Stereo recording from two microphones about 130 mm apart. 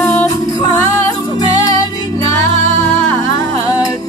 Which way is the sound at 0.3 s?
25° left (ahead or behind).